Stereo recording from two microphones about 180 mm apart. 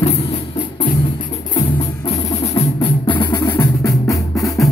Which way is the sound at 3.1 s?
15° left (ahead or behind).